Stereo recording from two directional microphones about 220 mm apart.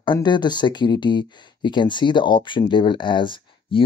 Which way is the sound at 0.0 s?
20° left (ahead or behind).